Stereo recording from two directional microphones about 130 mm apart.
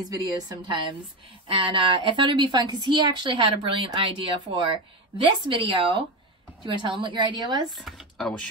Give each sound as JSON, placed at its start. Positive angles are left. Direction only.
{"t": 0.1, "sound": "a woman's voice", "side_deg": -30}
{"t": 1.5, "sound": "a woman's voice", "side_deg": -45}
{"t": 7.7, "sound": "speech", "side_deg": 0}